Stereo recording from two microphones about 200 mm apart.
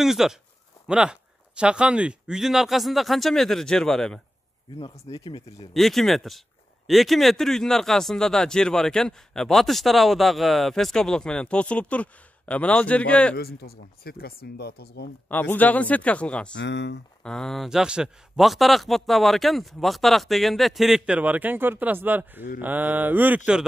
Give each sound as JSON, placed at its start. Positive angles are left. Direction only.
{"t": 0.0, "sound": "speech", "side_deg": 0}
{"t": 4.7, "sound": "speech", "side_deg": 30}
{"t": 5.7, "sound": "speech", "side_deg": 0}
{"t": 13.4, "sound": "speech", "side_deg": 50}
{"t": 15.2, "sound": "a man's voice", "side_deg": 10}
{"t": 16.5, "sound": "speech", "side_deg": 60}
{"t": 17.2, "sound": "speech", "side_deg": 5}
{"t": 22.6, "sound": "mantra", "side_deg": -10}